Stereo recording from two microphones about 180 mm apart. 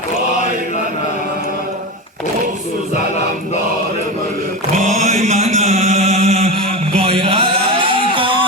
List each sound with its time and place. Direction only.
4.8 s mantra: 40° right (ahead or behind)